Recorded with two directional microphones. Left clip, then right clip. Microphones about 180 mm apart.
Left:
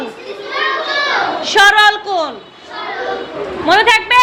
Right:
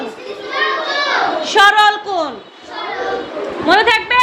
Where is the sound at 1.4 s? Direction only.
5° right (ahead or behind).